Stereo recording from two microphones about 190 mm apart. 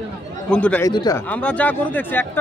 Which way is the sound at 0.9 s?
20° left (ahead or behind).